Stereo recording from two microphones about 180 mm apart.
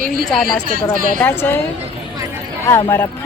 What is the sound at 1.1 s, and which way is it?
Speech, 10° left (ahead or behind).